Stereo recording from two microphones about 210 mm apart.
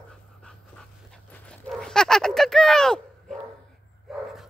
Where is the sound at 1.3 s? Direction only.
5° left (ahead or behind).